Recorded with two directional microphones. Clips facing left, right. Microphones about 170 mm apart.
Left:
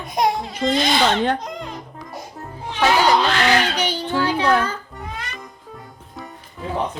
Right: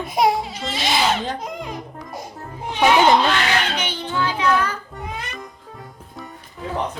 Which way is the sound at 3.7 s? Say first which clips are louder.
Left 3 dB; 40° left (ahead or behind).